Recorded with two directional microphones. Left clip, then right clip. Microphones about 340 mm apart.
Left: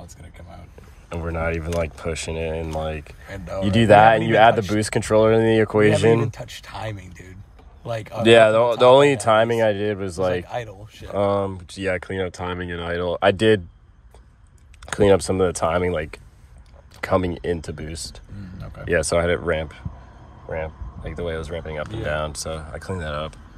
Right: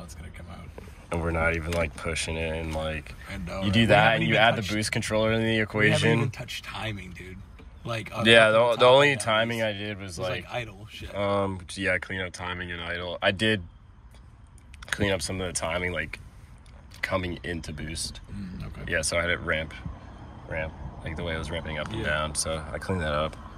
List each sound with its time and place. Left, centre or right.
1.0 s speech: centre; by 6.9 s left
8.2 s speech: centre
14.9 s speech: left